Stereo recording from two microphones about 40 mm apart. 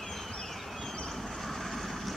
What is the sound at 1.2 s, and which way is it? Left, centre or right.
Vehicle, centre.